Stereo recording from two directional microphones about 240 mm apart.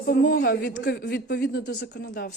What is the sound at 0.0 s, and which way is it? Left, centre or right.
A woman's voice, left.